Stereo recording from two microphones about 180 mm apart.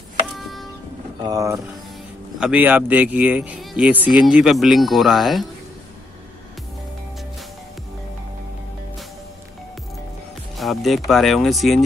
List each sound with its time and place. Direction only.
1.2 s speech: 20° right (ahead or behind)
2.3 s speech: 5° right (ahead or behind)
10.6 s speech: centre (ahead or behind)